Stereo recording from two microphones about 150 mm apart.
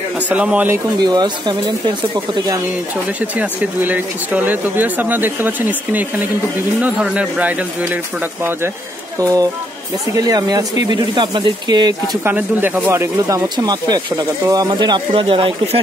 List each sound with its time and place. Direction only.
0.3 s speech: 10° right (ahead or behind)
1.0 s speech: 30° right (ahead or behind)
3.2 s speech: 10° right (ahead or behind)
9.2 s speech: 25° right (ahead or behind)
12.3 s speech: 15° right (ahead or behind); by 15.8 s 40° right (ahead or behind)